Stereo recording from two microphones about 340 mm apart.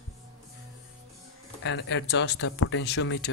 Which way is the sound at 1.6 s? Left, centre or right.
Left.